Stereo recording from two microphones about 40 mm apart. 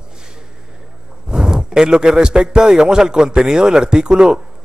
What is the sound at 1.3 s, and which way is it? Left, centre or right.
A man's voice, centre.